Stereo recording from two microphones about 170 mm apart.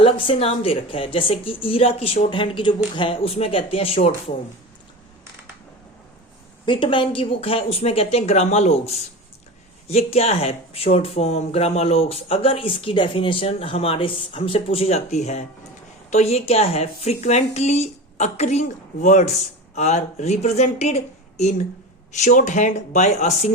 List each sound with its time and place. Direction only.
0.0 s speech: 35° left (ahead or behind)
6.7 s speech: 30° left (ahead or behind)